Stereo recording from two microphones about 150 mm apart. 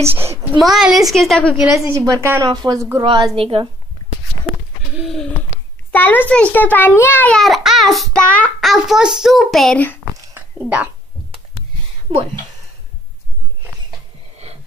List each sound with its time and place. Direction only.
0.1 s a child's voice: 15° right (ahead or behind)
0.6 s a child's voice: centre (ahead or behind)
1.9 s a woman's voice: 25° right (ahead or behind)
4.9 s a child's voice: centre (ahead or behind)
10.3 s a sound: 10° right (ahead or behind)